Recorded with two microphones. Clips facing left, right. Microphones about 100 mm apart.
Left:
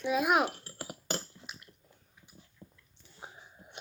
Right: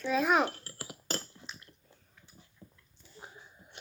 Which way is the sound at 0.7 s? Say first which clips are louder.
Left 1 dB; 15° left (ahead or behind).